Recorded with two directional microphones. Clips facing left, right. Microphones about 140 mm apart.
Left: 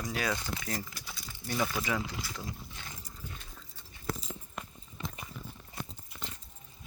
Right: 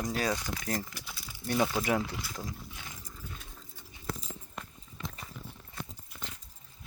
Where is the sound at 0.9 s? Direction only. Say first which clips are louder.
Even; 10° right (ahead or behind).